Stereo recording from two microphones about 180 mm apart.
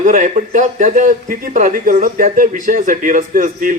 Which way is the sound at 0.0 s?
45° right (ahead or behind).